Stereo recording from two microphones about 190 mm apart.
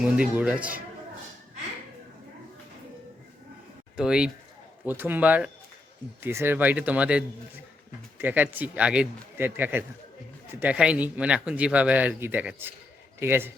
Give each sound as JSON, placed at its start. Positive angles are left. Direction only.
{"t": 0.0, "sound": "speech", "side_deg": -5}
{"t": 3.9, "sound": "a man's voice", "side_deg": -5}